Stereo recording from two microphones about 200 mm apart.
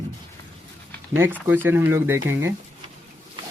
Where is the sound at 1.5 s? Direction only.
10° right (ahead or behind).